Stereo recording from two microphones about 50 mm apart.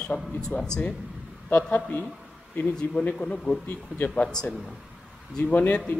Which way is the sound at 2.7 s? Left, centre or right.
Centre.